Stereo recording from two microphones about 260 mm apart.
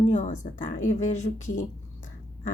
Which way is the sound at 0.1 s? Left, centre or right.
Left.